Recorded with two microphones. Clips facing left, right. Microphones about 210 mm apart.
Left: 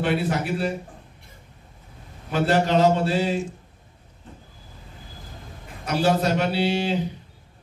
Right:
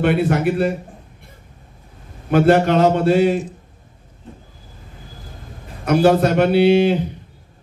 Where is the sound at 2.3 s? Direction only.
55° right (ahead or behind).